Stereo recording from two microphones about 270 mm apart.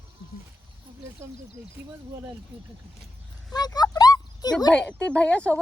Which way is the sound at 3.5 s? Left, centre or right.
Centre.